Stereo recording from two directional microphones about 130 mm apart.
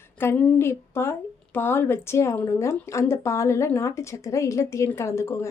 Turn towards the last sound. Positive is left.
turn(degrees=20)  # may be behind; listen again after turning